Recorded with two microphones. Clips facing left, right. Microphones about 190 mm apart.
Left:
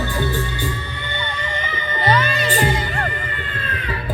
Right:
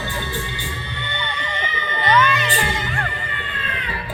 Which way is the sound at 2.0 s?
30° left (ahead or behind).